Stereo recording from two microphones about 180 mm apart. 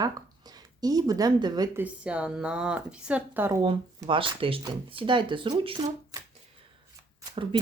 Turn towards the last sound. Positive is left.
turn(degrees=-30)  # may be behind; listen again after turning